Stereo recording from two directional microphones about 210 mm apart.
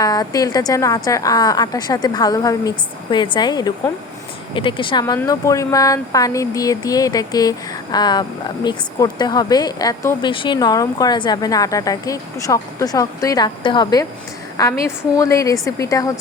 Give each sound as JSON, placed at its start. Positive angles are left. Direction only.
{"t": 0.0, "sound": "speech", "side_deg": 15}